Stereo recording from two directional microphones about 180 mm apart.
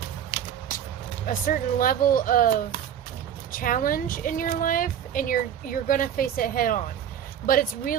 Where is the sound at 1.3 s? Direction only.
50° left (ahead or behind).